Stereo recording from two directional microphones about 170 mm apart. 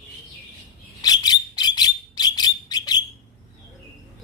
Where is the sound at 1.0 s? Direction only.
25° left (ahead or behind).